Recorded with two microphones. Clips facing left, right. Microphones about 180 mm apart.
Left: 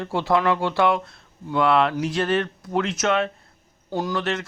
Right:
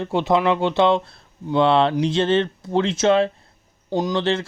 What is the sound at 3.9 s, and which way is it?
Speech, 20° right (ahead or behind).